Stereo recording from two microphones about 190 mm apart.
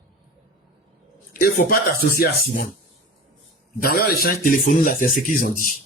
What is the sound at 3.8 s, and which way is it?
Speech, 50° left (ahead or behind).